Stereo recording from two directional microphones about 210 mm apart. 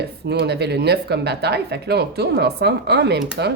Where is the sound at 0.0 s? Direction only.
50° right (ahead or behind).